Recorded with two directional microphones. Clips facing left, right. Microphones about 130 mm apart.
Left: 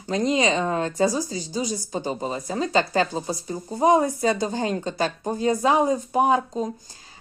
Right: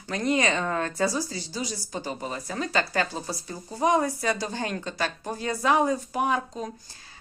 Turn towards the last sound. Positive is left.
turn(degrees=30)  # may be behind; listen again after turning